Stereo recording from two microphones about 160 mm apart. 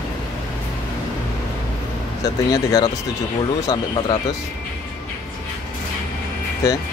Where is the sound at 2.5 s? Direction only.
25° left (ahead or behind).